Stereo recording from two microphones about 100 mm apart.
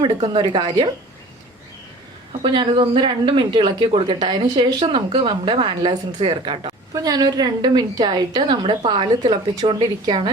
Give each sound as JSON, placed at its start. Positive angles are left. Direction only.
{"t": 0.0, "sound": "a woman's voice", "side_deg": -50}
{"t": 2.4, "sound": "speech", "side_deg": -60}
{"t": 4.2, "sound": "a woman's voice", "side_deg": -45}
{"t": 6.9, "sound": "a woman's voice", "side_deg": -40}
{"t": 9.6, "sound": "speech", "side_deg": -60}